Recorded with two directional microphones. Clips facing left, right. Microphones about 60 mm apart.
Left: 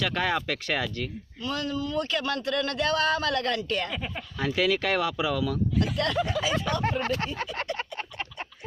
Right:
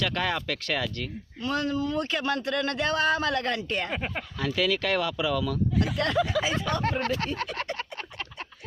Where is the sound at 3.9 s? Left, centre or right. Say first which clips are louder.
Right 2 dB; right.